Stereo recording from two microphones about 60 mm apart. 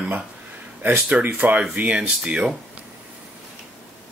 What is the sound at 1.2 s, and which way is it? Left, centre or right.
Speech, right.